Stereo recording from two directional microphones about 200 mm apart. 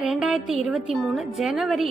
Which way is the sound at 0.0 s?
Centre (ahead or behind).